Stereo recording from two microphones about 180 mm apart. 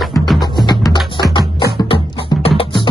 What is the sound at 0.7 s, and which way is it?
Music, 25° left (ahead or behind).